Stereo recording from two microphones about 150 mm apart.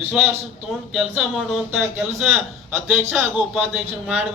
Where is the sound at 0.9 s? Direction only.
5° right (ahead or behind).